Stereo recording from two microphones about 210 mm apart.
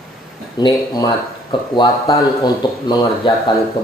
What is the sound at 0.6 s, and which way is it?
Speech, 20° left (ahead or behind).